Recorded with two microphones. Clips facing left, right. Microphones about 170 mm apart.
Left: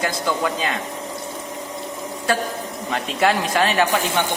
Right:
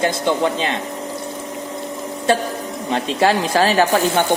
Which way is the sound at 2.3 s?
25° right (ahead or behind).